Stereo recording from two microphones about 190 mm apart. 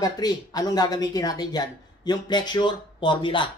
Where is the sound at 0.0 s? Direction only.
20° left (ahead or behind).